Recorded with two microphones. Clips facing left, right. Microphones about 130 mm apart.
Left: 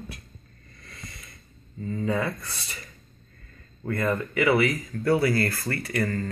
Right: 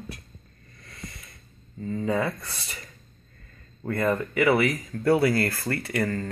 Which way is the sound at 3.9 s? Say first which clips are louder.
Right 1 dB; 25° right (ahead or behind).